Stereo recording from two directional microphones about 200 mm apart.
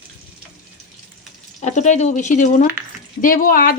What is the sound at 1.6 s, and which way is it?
Speech, 35° left (ahead or behind).